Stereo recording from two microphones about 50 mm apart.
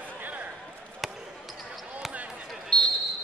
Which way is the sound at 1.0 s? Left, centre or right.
Centre.